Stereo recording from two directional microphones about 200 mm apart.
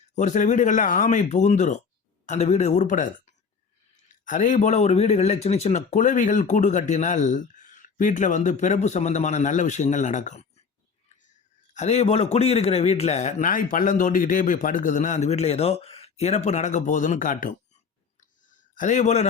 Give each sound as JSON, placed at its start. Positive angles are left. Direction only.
{"t": 0.2, "sound": "speech", "side_deg": 35}
{"t": 4.3, "sound": "speech", "side_deg": 40}
{"t": 11.7, "sound": "speech", "side_deg": 35}
{"t": 18.2, "sound": "a sound", "side_deg": 40}